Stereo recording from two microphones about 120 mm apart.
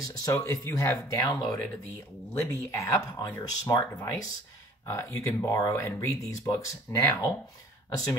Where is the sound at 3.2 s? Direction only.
35° left (ahead or behind).